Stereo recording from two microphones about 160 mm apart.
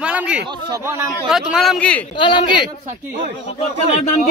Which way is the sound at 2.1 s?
30° left (ahead or behind).